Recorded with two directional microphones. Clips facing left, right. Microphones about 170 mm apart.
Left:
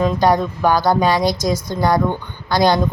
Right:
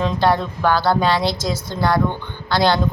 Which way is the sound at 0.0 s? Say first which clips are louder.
Left 3 dB; 15° left (ahead or behind).